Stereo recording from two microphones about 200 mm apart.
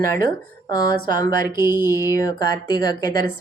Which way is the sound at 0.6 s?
20° left (ahead or behind).